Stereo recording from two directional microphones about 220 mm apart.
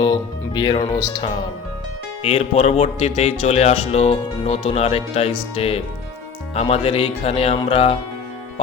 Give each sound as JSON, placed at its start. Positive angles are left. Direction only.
{"t": 0.0, "sound": "a man's voice", "side_deg": 20}
{"t": 2.2, "sound": "a man's voice", "side_deg": 30}